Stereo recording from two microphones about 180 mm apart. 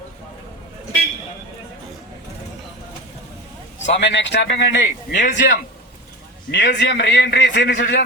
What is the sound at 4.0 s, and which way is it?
A man's voice, 80° left.